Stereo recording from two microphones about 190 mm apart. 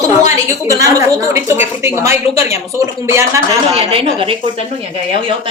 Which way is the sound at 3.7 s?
30° right (ahead or behind).